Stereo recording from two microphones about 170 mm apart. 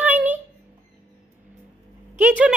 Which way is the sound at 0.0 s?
10° right (ahead or behind).